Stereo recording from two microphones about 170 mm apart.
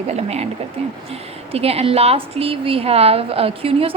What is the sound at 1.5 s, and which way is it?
A woman's voice, 35° right (ahead or behind).